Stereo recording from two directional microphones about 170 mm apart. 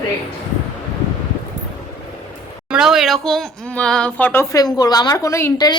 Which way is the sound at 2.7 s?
5° right (ahead or behind).